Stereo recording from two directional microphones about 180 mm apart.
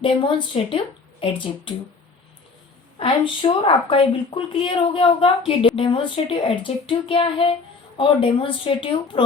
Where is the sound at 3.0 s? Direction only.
30° left (ahead or behind).